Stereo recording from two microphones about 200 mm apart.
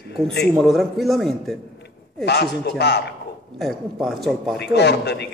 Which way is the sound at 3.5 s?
Centre (ahead or behind).